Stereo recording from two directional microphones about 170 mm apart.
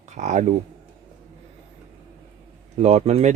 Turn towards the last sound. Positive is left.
turn(degrees=-40)  # may be behind; listen again after turning